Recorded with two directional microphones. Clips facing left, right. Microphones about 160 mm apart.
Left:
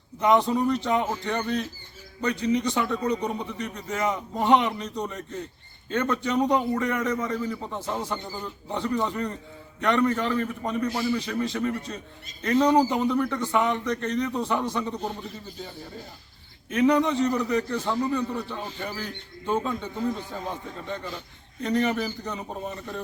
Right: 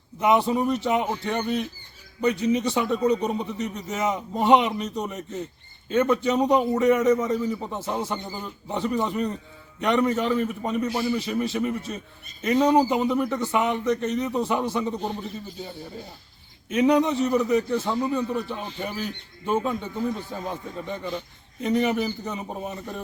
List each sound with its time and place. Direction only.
0.2 s a man's voice: 10° right (ahead or behind)
16.6 s a man's voice: 15° right (ahead or behind)
21.6 s a man's voice: 15° right (ahead or behind)